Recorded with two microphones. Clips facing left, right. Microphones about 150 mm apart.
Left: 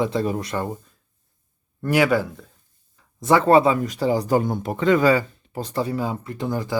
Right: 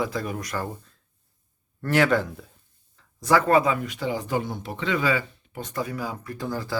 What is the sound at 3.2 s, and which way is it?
Speech, 25° left (ahead or behind).